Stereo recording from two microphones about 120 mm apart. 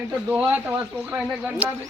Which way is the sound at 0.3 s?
15° right (ahead or behind).